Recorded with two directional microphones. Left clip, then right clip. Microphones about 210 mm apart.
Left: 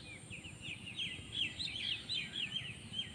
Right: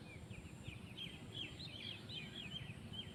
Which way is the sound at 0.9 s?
50° right (ahead or behind).